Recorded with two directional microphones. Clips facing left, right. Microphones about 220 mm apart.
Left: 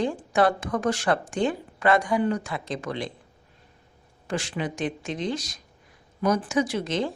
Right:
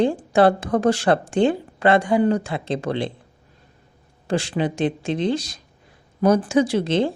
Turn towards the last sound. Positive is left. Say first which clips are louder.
# right 6 dB
turn(degrees=-30)  # may be behind; listen again after turning